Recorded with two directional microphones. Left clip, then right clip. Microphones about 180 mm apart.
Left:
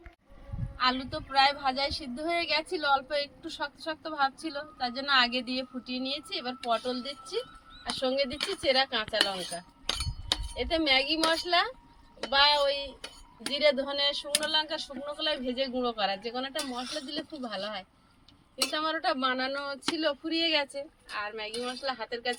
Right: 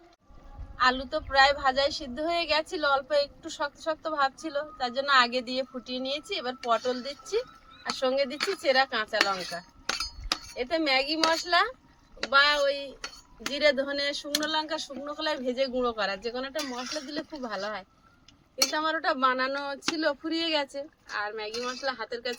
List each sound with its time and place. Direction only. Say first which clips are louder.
1.1 s a woman's voice: right 3 dB; 15° right (ahead or behind)